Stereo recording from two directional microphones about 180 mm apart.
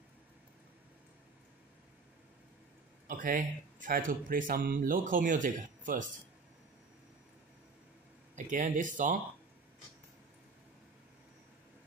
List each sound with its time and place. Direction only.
3.1 s speech: 50° right (ahead or behind)
8.5 s speech: 45° right (ahead or behind)